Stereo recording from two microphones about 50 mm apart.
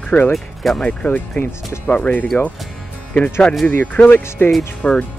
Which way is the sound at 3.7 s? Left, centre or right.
Left.